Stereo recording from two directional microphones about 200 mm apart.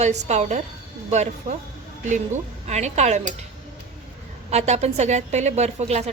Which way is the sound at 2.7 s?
35° right (ahead or behind).